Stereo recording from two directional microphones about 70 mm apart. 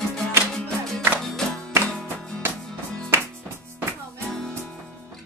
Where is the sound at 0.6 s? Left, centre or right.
Centre.